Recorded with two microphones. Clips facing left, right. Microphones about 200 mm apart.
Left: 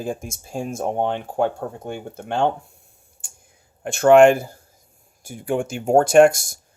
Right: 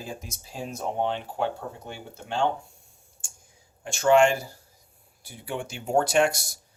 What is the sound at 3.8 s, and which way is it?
Speech, 55° left (ahead or behind).